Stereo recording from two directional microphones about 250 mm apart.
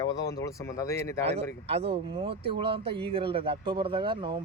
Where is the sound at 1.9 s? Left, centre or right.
Right.